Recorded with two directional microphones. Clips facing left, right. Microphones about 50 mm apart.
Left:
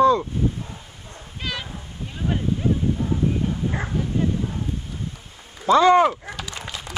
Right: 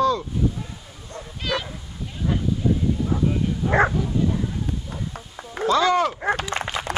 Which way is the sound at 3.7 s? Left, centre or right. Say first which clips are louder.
Right 11 dB; right.